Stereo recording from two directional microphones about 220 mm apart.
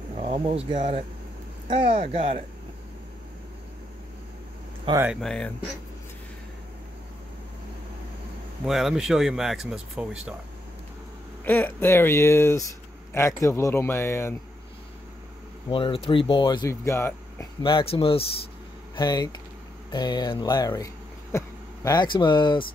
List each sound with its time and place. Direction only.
0.2 s speech: 25° right (ahead or behind)
4.8 s speech: 15° right (ahead or behind)
5.1 s speech: centre (ahead or behind)
8.6 s speech: centre (ahead or behind)
11.4 s speech: 10° left (ahead or behind)
15.7 s speech: 25° left (ahead or behind)